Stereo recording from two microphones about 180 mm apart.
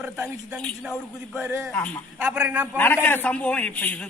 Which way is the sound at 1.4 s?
10° right (ahead or behind).